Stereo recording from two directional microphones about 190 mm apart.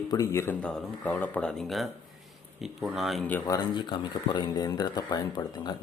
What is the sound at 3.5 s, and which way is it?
Speech, 25° left (ahead or behind).